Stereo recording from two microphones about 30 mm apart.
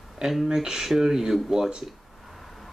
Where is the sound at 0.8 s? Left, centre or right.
Centre.